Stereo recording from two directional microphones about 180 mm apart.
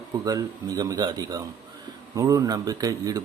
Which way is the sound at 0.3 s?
20° right (ahead or behind).